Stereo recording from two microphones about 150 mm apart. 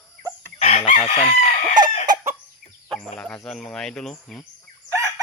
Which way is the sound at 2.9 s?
5° left (ahead or behind).